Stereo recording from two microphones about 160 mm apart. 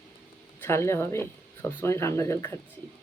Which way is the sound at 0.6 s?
15° left (ahead or behind).